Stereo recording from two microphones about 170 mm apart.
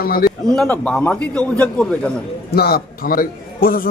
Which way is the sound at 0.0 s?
60° left (ahead or behind).